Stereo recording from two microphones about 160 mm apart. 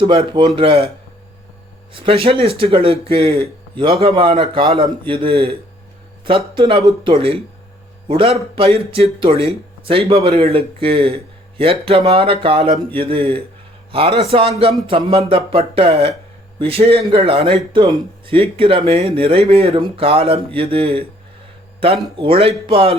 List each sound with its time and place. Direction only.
0.0 s speech: 35° right (ahead or behind)
1.9 s speech: 35° right (ahead or behind)
6.9 s speech: centre (ahead or behind)
8.0 s speech: 30° right (ahead or behind)
22.2 s speech: 35° right (ahead or behind)